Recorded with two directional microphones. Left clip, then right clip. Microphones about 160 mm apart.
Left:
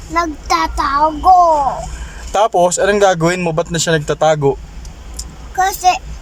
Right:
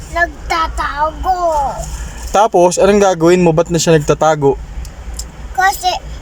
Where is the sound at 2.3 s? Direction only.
Centre (ahead or behind).